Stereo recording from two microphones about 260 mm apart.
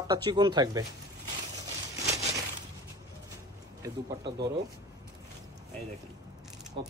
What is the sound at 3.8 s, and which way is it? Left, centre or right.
Speech, centre.